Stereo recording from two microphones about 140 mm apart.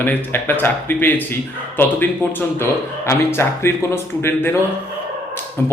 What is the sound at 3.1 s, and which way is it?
A man's voice, 20° left (ahead or behind).